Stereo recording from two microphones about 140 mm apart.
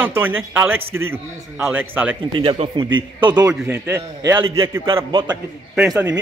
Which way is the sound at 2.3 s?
35° right (ahead or behind).